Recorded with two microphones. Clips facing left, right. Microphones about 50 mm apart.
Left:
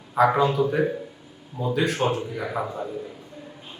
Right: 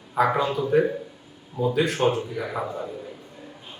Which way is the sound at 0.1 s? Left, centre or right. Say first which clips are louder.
Left 2 dB; centre.